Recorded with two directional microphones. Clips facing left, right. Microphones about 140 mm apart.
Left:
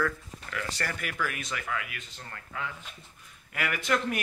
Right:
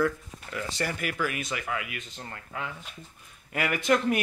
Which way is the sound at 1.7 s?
20° right (ahead or behind).